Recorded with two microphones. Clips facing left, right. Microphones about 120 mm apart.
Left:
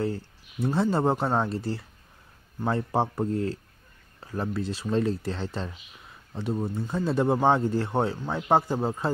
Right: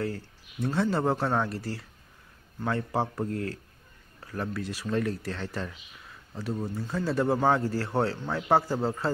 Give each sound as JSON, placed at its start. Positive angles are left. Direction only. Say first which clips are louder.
{"t": 0.0, "sound": "speech", "louder": "left 3 dB", "side_deg": 25}